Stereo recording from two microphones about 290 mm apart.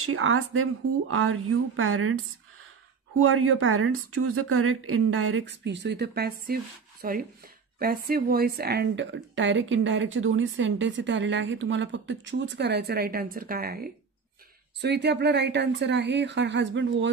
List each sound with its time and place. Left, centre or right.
0.0 s speech: right
3.2 s speech: right